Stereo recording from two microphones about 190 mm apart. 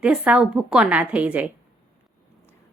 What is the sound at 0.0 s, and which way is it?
A woman's voice, 5° right (ahead or behind).